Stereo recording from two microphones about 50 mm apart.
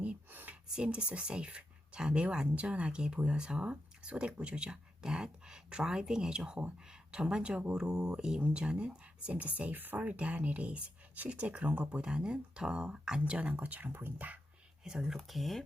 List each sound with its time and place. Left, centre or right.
0.3 s a sound: right
0.8 s speech: right
10.1 s speech: right
13.3 s speech: right
14.8 s speech: centre
15.3 s speech: centre